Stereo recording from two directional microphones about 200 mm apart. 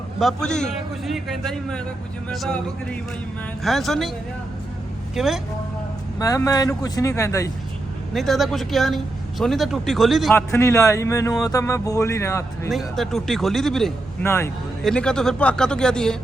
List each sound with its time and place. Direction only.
0.2 s a man's voice: centre (ahead or behind)
5.1 s a man's voice: centre (ahead or behind)
6.1 s speech: 15° left (ahead or behind)
8.1 s a man's voice: centre (ahead or behind)
10.3 s speech: 15° left (ahead or behind)
12.7 s a man's voice: centre (ahead or behind)
14.3 s a man's voice: 10° left (ahead or behind)